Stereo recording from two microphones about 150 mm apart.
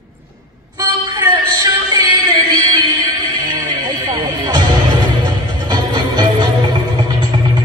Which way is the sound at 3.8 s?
30° right (ahead or behind).